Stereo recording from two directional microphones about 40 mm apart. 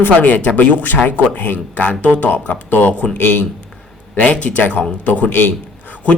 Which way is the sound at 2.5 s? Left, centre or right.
Left.